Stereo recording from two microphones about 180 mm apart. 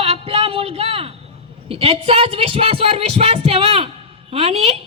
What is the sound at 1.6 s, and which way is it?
A woman's voice, 30° right (ahead or behind).